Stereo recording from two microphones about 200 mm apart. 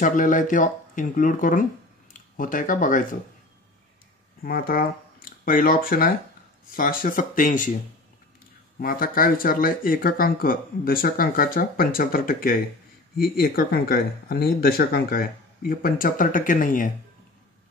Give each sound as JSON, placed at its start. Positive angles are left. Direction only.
{"t": 0.0, "sound": "speech", "side_deg": 40}
{"t": 4.4, "sound": "speech", "side_deg": 45}
{"t": 8.7, "sound": "speech", "side_deg": 45}